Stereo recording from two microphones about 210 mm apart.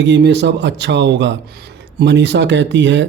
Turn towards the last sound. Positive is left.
turn(degrees=-55)  # may be behind; listen again after turning